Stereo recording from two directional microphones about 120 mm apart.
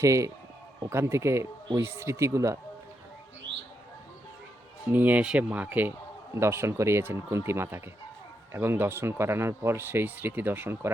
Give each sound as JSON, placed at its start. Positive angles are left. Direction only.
{"t": 0.0, "sound": "speech", "side_deg": -25}
{"t": 4.9, "sound": "speech", "side_deg": -15}